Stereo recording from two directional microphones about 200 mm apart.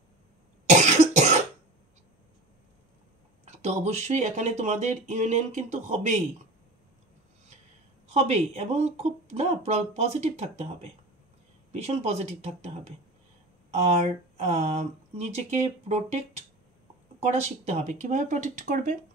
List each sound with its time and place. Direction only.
0.7 s cough: 35° right (ahead or behind)
3.4 s speech: 35° right (ahead or behind)
8.1 s speech: 35° right (ahead or behind)